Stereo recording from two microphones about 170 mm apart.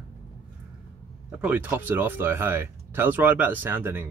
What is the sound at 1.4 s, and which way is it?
Speech, 10° right (ahead or behind).